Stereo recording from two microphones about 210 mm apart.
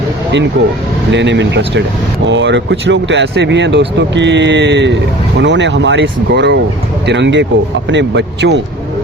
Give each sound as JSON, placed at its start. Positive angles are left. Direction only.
{"t": 1.1, "sound": "speech", "side_deg": -60}